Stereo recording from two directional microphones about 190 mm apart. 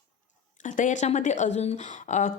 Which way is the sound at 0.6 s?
40° left (ahead or behind).